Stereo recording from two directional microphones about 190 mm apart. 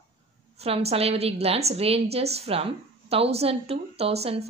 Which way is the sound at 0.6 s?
30° right (ahead or behind).